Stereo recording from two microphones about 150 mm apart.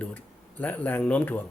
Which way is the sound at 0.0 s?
10° left (ahead or behind).